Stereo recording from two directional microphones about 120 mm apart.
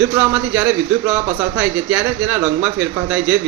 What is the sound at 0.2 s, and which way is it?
A man's voice, 15° right (ahead or behind).